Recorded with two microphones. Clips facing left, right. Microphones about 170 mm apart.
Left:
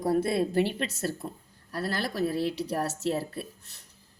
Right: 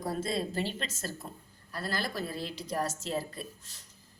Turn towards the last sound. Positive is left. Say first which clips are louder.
# left 5 dB
turn(degrees=65)  # may be behind; listen again after turning